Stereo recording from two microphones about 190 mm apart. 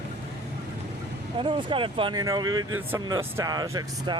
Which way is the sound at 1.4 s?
25° right (ahead or behind).